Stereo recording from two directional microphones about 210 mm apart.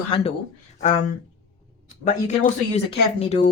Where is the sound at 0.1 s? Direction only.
25° left (ahead or behind).